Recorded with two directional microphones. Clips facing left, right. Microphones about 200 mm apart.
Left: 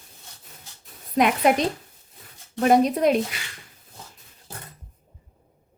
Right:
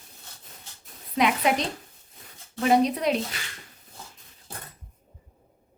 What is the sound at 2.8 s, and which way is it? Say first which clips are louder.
Speech: left 4 dB; 50° left (ahead or behind).